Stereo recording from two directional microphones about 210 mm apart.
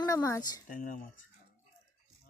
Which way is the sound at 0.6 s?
40° left (ahead or behind).